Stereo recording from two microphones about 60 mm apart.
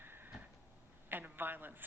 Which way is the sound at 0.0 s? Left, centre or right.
Right.